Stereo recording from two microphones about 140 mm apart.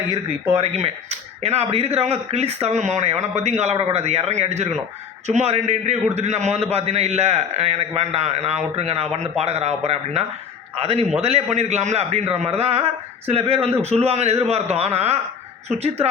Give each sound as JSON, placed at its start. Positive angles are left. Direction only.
{"t": 0.5, "sound": "a man's voice", "side_deg": -45}